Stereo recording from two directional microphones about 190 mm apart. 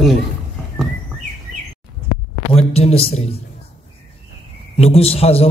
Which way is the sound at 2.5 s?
35° left (ahead or behind).